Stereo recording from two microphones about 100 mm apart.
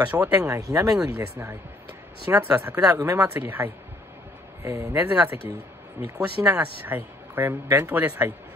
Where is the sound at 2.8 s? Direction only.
35° right (ahead or behind).